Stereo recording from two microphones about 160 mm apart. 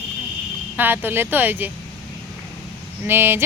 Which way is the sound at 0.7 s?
10° right (ahead or behind).